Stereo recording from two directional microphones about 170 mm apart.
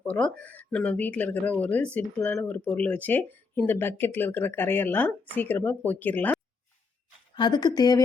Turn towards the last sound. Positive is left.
turn(degrees=25)  # may be behind; listen again after turning